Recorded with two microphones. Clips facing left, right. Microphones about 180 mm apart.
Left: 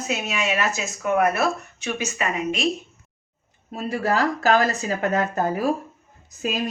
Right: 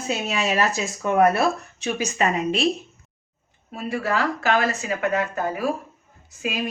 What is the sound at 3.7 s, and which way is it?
Speech, 40° left (ahead or behind).